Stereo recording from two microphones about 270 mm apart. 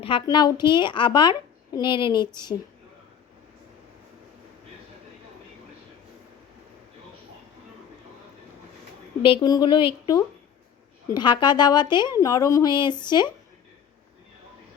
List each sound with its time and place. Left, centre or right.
0.0 s a woman's voice: centre
9.2 s a woman's voice: centre